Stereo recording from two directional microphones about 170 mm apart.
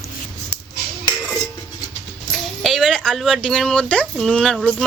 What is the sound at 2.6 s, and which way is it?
Speech, centre (ahead or behind).